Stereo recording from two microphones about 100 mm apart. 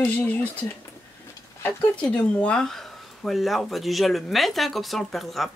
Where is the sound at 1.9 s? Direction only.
10° left (ahead or behind).